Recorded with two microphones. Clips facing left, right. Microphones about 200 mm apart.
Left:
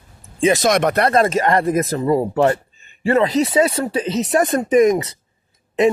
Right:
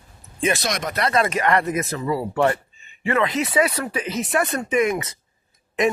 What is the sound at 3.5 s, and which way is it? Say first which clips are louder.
Speech: left 4 dB; 25° left (ahead or behind).